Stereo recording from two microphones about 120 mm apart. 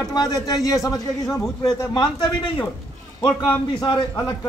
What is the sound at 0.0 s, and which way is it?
A man's voice, 35° left (ahead or behind).